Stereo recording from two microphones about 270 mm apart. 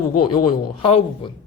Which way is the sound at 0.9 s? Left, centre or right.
Left.